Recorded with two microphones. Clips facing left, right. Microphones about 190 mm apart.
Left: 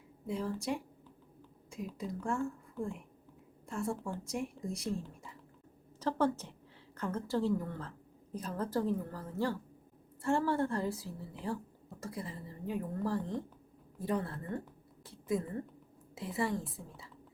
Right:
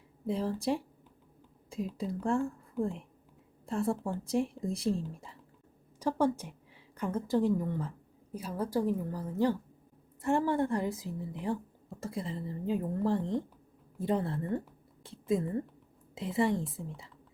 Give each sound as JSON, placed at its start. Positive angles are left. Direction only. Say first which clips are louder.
{"t": 0.3, "sound": "a woman's voice", "louder": "right 5 dB", "side_deg": -35}
{"t": 3.7, "sound": "a woman's voice", "louder": "right 5 dB", "side_deg": -35}
{"t": 6.0, "sound": "a woman's voice", "louder": "right 3 dB", "side_deg": -15}